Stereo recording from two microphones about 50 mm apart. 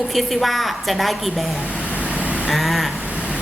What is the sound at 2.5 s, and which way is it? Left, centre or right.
Speech, centre.